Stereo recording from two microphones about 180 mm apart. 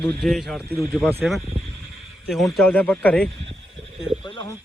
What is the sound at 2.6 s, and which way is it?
Speech, 10° left (ahead or behind).